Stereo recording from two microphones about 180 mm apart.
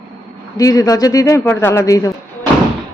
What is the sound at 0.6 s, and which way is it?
A man's voice, 20° left (ahead or behind).